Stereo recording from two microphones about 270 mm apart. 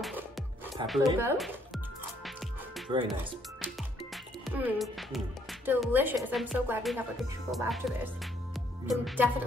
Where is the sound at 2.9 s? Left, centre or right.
Centre.